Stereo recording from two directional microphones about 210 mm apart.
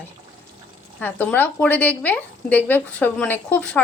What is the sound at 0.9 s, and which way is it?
A woman's voice, 5° left (ahead or behind).